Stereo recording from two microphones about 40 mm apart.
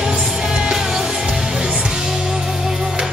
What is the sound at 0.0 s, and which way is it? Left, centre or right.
Music, centre.